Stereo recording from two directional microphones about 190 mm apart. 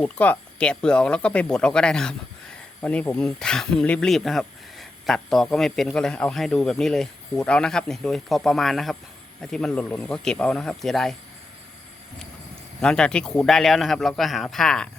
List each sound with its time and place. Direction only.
0.0 s speech: 5° left (ahead or behind)
12.8 s speech: 5° left (ahead or behind)